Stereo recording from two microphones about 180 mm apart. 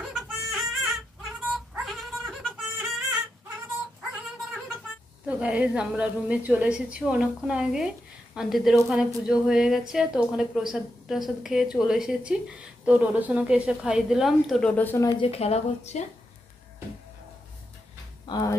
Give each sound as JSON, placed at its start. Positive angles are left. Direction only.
{"t": 0.0, "sound": "dog", "side_deg": 0}
{"t": 5.2, "sound": "a woman's voice", "side_deg": -5}
{"t": 15.1, "sound": "speech", "side_deg": 30}
{"t": 18.2, "sound": "speech", "side_deg": 20}